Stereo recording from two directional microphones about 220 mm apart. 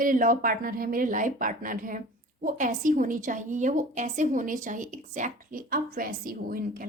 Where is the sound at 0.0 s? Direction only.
40° right (ahead or behind).